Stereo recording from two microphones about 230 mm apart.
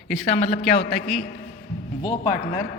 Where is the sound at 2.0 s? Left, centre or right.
Centre.